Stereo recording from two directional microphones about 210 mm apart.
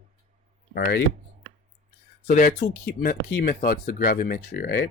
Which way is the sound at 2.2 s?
40° left (ahead or behind).